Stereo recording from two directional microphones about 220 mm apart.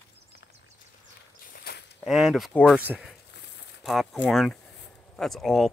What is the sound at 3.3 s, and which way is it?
Crumpling, 50° left (ahead or behind).